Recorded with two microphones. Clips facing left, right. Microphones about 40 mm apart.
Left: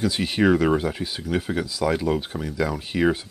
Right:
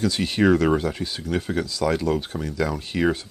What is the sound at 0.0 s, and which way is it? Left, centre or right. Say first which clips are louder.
Speech: even; centre.